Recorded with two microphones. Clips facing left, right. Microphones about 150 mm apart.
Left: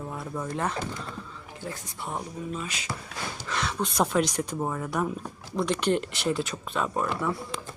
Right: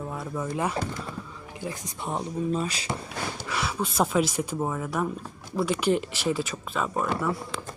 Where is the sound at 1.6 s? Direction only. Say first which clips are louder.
Right 3 dB; 20° right (ahead or behind).